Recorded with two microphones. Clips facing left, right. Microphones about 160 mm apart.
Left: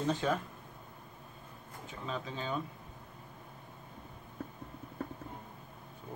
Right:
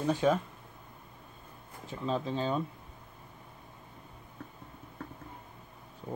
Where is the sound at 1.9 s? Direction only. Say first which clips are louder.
Right 7 dB; 35° right (ahead or behind).